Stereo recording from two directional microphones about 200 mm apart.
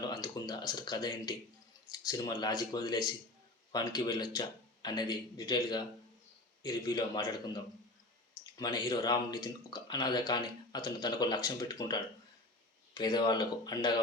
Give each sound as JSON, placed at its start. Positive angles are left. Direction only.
{"t": 0.1, "sound": "speech", "side_deg": 20}